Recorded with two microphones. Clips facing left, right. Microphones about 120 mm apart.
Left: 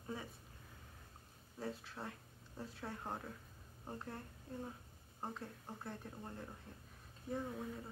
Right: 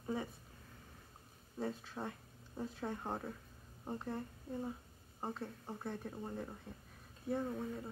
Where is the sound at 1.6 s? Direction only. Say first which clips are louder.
Right 4 dB; 20° right (ahead or behind).